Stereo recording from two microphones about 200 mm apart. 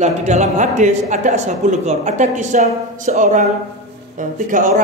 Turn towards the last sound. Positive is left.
turn(degrees=-40)  # may be behind; listen again after turning